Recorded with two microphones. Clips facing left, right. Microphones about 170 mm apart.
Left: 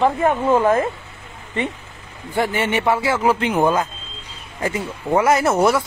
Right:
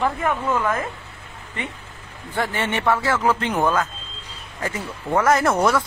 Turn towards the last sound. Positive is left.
turn(degrees=10)  # may be behind; listen again after turning